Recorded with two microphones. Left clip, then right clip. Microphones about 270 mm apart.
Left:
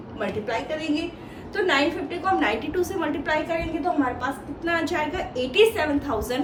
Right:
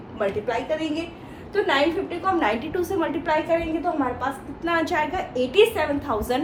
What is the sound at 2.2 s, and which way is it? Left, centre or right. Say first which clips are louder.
A woman's voice: even; centre.